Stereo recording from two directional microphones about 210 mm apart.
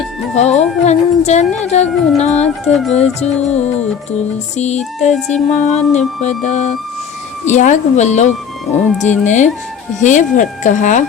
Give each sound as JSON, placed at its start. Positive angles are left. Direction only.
{"t": 0.3, "sound": "speech", "side_deg": 30}
{"t": 2.6, "sound": "speech", "side_deg": 0}
{"t": 2.9, "sound": "speech", "side_deg": 30}
{"t": 4.5, "sound": "speech", "side_deg": 35}